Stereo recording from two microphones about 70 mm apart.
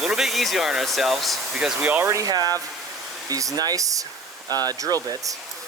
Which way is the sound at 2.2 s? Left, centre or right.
Right.